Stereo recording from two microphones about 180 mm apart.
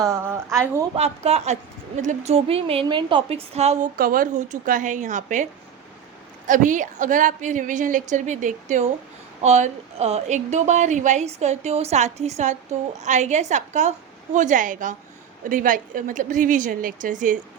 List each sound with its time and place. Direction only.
0.1 s speech: 15° right (ahead or behind)
0.9 s a woman's voice: 35° right (ahead or behind)
3.9 s a woman's voice: 50° right (ahead or behind)
6.5 s a woman's voice: 45° right (ahead or behind)